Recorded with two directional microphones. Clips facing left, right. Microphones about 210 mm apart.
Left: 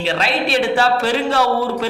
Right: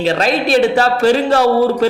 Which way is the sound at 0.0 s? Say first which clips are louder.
Right 5 dB; 40° right (ahead or behind).